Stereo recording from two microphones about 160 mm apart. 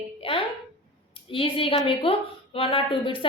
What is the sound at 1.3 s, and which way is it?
A woman's voice, 35° left (ahead or behind).